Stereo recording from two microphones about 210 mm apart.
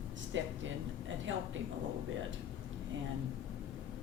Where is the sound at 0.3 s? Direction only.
65° right (ahead or behind).